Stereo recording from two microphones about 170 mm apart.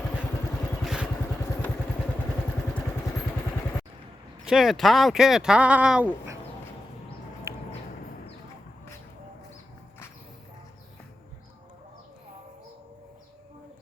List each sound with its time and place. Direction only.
0.8 s vehicle: 5° right (ahead or behind)
4.4 s speech: centre (ahead or behind)
7.5 s a sound: 15° right (ahead or behind)